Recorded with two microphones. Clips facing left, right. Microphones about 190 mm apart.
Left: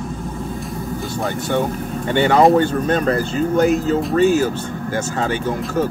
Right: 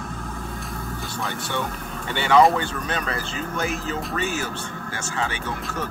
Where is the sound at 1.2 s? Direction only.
45° left (ahead or behind).